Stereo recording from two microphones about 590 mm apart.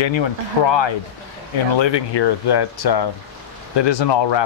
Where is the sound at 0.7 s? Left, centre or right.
Left.